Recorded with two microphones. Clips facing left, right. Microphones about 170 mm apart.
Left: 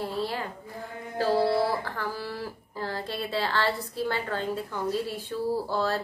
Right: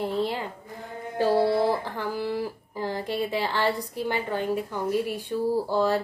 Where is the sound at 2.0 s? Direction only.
20° right (ahead or behind).